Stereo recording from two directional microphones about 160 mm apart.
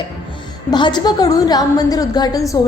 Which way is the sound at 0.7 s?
25° left (ahead or behind).